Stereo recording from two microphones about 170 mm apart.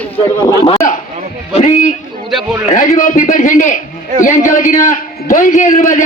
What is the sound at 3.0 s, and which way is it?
A man's voice, 50° left (ahead or behind).